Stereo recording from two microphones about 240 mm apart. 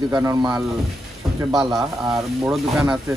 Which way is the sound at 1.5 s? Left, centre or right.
Centre.